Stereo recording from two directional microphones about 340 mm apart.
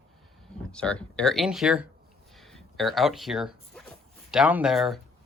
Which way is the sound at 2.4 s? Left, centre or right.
Centre.